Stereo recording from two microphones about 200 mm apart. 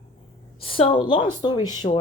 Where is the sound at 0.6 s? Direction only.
30° left (ahead or behind).